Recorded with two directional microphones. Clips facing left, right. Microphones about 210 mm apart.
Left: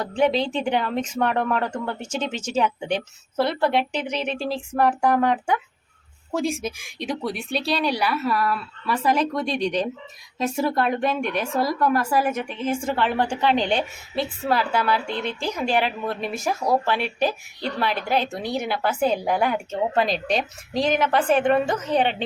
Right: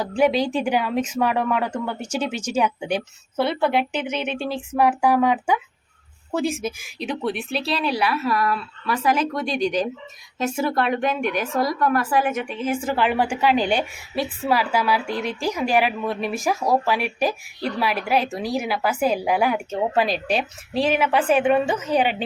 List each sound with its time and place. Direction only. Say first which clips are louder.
0.2 s a woman's voice: right 2 dB; 10° right (ahead or behind)
11.3 s speech: right 1 dB; 30° left (ahead or behind)
11.6 s speech: even; centre (ahead or behind)